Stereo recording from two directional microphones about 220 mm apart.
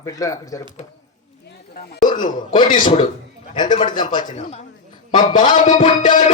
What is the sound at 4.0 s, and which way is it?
Speech, 20° left (ahead or behind).